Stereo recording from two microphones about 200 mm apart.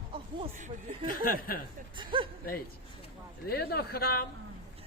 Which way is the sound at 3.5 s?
50° left (ahead or behind).